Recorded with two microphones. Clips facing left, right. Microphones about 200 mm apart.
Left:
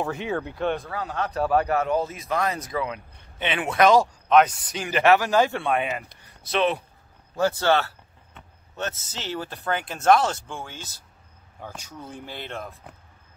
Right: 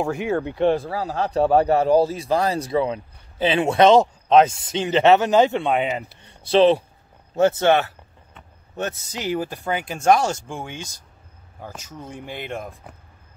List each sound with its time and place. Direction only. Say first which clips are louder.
0.0 s speech: right 5 dB; 10° right (ahead or behind)
0.6 s a man's voice: right 7 dB; 30° right (ahead or behind)
6.2 s a sound: right 9 dB; 30° right (ahead or behind)
7.3 s a man's voice: right 5 dB; 20° right (ahead or behind)
12.1 s speech: right 5 dB; 15° right (ahead or behind)